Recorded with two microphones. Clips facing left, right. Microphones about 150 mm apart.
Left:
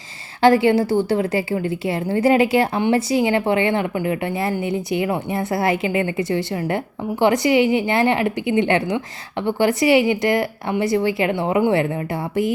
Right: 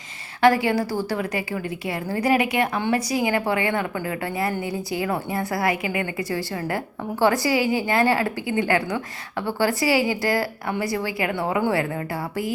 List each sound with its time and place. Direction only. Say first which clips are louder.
0.4 s a woman's voice: left 4 dB; 25° left (ahead or behind)